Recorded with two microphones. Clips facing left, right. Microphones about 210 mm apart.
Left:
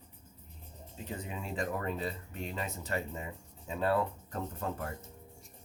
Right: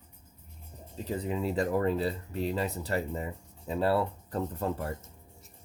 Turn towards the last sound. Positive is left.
turn(degrees=-35)  # may be behind; listen again after turning